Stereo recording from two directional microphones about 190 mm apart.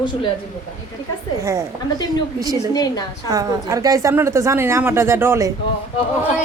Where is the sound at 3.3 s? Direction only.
20° right (ahead or behind).